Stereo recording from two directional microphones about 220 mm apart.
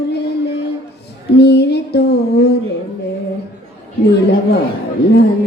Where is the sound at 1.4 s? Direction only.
50° left (ahead or behind).